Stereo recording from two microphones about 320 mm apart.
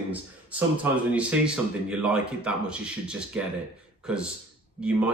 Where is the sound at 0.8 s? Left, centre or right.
Centre.